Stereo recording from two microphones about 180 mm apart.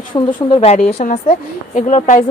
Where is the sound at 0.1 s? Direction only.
25° left (ahead or behind).